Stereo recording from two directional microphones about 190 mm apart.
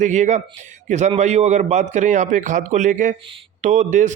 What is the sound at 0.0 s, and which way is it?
Speech, 40° right (ahead or behind).